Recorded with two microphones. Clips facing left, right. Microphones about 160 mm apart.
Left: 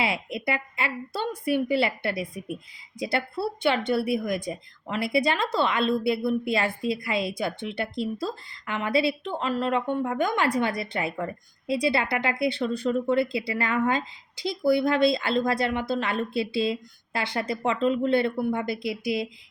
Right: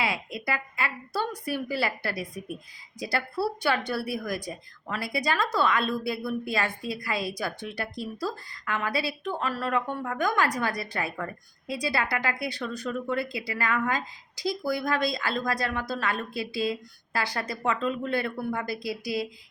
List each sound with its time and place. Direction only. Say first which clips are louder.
0.0 s a woman's voice: left 3 dB; 25° left (ahead or behind)